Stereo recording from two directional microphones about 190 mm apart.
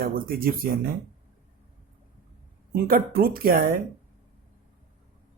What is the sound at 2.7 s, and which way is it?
Speech, 50° right (ahead or behind).